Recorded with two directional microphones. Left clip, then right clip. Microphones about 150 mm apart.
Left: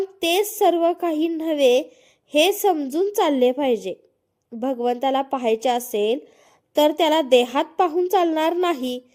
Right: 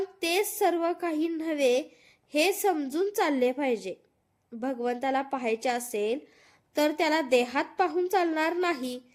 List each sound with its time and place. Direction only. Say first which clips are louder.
0.0 s speech: left 7 dB; 35° left (ahead or behind)